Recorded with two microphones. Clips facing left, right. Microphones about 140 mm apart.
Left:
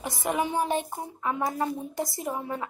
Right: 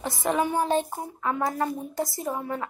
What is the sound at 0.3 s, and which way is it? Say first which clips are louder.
Speech: right 3 dB; 15° left (ahead or behind).